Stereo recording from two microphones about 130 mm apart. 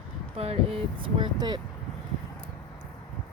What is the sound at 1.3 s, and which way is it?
Speech, 35° right (ahead or behind).